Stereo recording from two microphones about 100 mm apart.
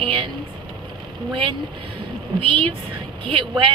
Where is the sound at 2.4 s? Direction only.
65° right (ahead or behind).